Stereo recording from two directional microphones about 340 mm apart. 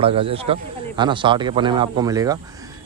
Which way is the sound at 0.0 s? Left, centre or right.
Centre.